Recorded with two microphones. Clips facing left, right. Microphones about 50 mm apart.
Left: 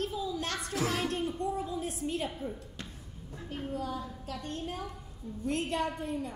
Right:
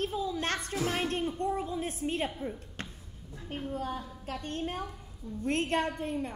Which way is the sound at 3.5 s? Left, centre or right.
Right.